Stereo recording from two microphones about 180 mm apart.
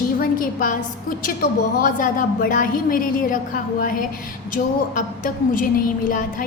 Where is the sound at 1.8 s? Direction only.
50° left (ahead or behind).